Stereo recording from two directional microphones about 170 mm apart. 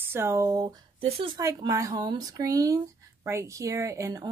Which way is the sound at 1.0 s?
35° right (ahead or behind).